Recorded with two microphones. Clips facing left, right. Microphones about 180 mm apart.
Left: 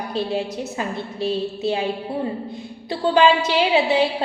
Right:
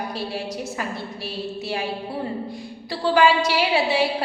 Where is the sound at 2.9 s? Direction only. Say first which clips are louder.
Left 2 dB; 20° left (ahead or behind).